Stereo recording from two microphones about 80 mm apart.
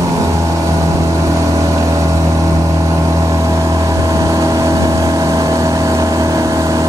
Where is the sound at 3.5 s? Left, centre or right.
Right.